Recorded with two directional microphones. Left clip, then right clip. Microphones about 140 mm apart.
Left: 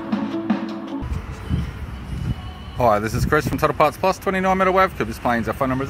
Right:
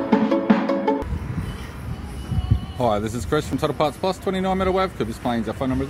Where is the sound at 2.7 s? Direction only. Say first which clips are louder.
Left 4 dB; centre (ahead or behind).